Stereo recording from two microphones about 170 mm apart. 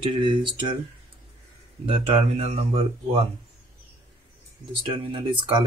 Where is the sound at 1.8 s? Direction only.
30° right (ahead or behind).